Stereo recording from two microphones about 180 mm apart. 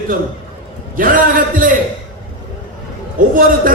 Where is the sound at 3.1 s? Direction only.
50° right (ahead or behind).